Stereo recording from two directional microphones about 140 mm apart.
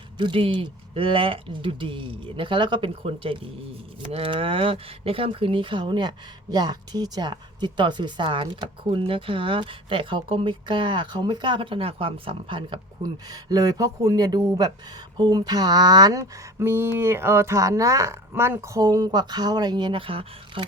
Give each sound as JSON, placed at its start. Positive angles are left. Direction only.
{"t": 0.2, "sound": "speech", "side_deg": -40}